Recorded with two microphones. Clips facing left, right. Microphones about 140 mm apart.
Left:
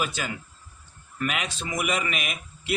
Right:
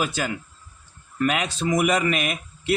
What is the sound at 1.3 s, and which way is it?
Speech, 40° right (ahead or behind).